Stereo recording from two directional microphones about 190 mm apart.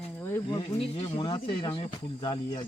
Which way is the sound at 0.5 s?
25° left (ahead or behind).